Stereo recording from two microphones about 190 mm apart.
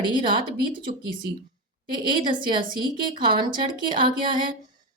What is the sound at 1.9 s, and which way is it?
A woman's voice, 25° right (ahead or behind).